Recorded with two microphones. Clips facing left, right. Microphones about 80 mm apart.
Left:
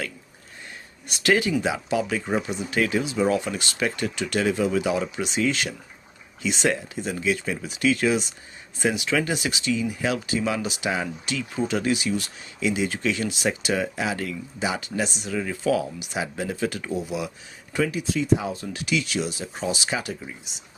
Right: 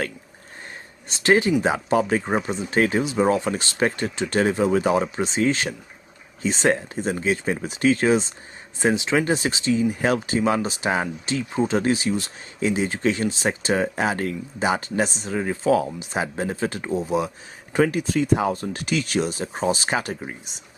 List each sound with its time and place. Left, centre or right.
1.0 s speech: right
1.6 s speech: right
17.7 s speech: right
18.6 s speech: right